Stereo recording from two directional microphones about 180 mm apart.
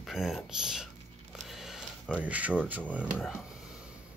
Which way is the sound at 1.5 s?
Centre (ahead or behind).